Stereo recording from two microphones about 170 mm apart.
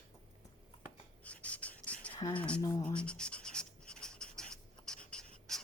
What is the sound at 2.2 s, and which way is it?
Speech, 20° left (ahead or behind).